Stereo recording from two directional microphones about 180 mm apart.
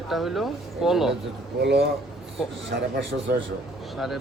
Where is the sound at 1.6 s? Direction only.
65° right (ahead or behind).